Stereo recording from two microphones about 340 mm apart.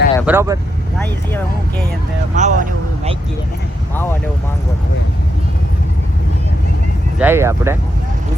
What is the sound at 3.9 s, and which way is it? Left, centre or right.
Speech, centre.